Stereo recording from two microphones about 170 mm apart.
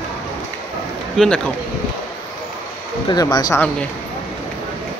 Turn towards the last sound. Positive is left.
turn(degrees=20)  # may be behind; listen again after turning